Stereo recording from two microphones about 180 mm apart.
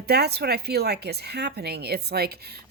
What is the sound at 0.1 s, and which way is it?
Speech, 65° right (ahead or behind).